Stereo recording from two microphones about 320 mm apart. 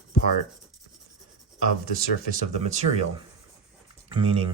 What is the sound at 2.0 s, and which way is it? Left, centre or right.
Speech, right.